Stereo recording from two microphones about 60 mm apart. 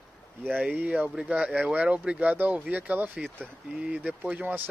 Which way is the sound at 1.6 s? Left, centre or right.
Right.